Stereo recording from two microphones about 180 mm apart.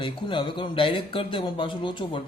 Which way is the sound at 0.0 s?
25° left (ahead or behind).